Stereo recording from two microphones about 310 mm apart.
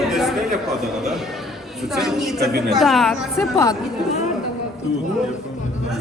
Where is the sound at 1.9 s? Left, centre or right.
Centre.